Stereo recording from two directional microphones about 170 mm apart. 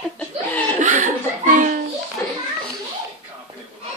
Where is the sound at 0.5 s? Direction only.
10° left (ahead or behind).